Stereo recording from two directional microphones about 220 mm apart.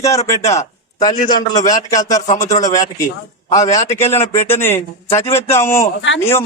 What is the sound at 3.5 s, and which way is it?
A man's voice, 15° left (ahead or behind).